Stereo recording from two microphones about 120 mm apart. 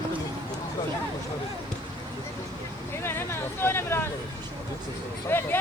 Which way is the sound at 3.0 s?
20° left (ahead or behind).